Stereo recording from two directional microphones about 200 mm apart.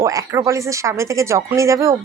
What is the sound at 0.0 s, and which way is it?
Speech, 15° right (ahead or behind).